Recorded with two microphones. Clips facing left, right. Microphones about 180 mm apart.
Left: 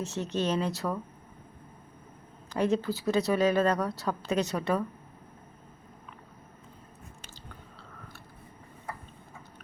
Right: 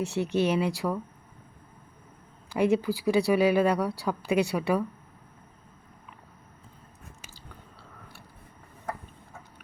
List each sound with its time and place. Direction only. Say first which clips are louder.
0.0 s speech: right 4 dB; 15° right (ahead or behind)
2.5 s speech: right 3 dB; 10° right (ahead or behind)